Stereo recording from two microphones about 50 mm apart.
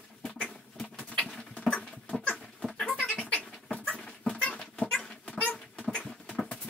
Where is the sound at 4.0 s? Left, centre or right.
Centre.